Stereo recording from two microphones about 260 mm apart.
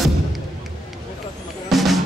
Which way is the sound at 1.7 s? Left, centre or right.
Centre.